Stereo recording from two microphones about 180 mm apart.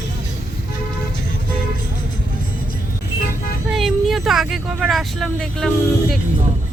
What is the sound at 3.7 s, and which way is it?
Speech, centre (ahead or behind).